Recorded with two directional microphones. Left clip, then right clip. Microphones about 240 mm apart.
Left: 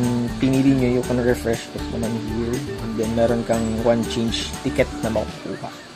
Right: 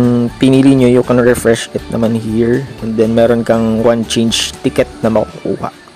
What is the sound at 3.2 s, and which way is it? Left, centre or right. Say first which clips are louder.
Speech: right 8 dB; right.